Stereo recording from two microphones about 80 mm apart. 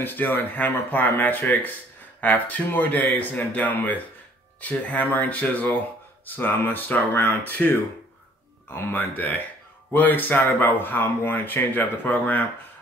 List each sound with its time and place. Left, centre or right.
0.0 s speech: left
8.7 s speech: left